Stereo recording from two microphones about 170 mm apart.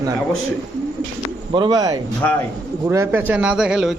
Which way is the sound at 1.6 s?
25° right (ahead or behind).